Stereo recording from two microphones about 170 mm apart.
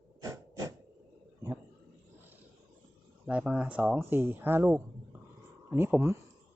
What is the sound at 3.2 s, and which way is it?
Speech, 5° right (ahead or behind).